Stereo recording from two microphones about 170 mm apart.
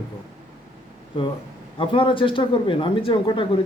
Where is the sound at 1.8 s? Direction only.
30° left (ahead or behind).